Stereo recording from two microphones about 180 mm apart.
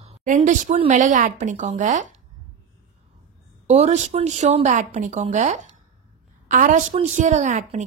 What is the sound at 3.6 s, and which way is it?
A woman's voice, 40° right (ahead or behind).